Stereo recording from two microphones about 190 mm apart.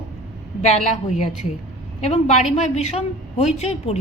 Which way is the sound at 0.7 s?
35° left (ahead or behind).